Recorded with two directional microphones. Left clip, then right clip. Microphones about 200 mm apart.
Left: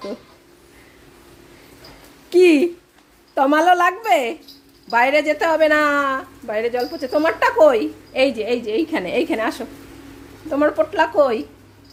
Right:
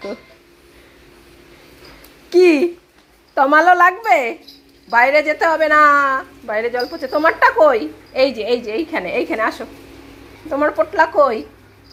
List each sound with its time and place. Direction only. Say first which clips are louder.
2.3 s babbling: right 1 dB; 15° left (ahead or behind)
3.3 s a woman's voice: right 3 dB; 20° left (ahead or behind)